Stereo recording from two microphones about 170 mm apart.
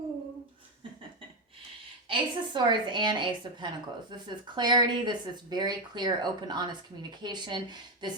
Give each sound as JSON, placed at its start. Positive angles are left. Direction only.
{"t": 2.0, "sound": "speech", "side_deg": -25}